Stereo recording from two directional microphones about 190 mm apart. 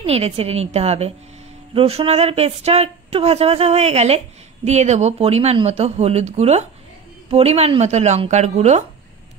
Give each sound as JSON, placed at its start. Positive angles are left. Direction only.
{"t": 0.0, "sound": "speech", "side_deg": -35}